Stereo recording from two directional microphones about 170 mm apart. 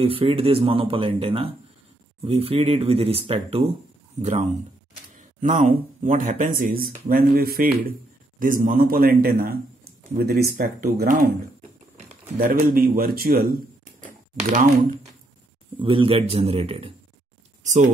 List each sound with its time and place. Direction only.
0.0 s a man's voice: 35° right (ahead or behind); by 11.3 s 60° right (ahead or behind)
12.4 s a man's voice: 60° right (ahead or behind)
14.0 s speech: 50° right (ahead or behind)
15.8 s speech: 30° right (ahead or behind)